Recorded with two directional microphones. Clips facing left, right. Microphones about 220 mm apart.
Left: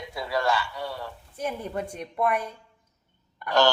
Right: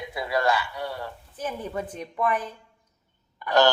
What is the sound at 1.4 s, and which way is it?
Speech, 10° left (ahead or behind).